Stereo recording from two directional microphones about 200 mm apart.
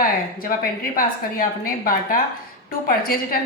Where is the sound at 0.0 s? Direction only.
45° left (ahead or behind).